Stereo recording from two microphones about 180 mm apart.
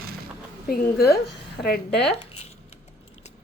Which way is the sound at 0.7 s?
60° left (ahead or behind).